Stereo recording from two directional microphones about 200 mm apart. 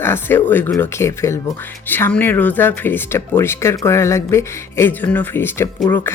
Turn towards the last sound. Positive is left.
turn(degrees=10)  # may be behind; listen again after turning